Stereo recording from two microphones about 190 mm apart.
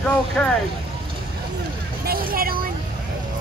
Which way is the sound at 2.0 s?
50° right (ahead or behind).